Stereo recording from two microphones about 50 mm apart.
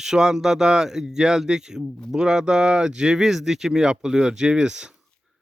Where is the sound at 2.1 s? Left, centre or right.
Centre.